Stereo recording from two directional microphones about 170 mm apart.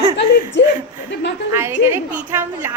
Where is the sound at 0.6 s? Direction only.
90° left.